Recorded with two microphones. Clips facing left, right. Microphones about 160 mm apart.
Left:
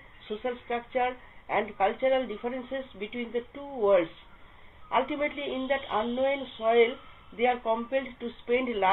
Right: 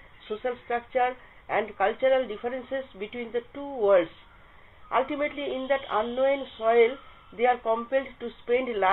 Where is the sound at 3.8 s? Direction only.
25° left (ahead or behind).